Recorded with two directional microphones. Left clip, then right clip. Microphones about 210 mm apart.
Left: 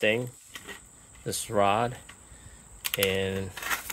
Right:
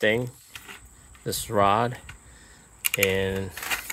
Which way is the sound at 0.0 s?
25° right (ahead or behind).